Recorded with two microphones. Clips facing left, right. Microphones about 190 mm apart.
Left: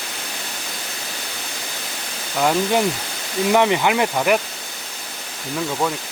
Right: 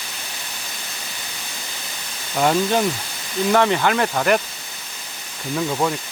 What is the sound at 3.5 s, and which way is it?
Speech, 15° left (ahead or behind).